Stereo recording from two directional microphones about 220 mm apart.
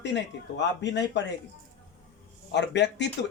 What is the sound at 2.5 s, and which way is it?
Speech, 50° left (ahead or behind).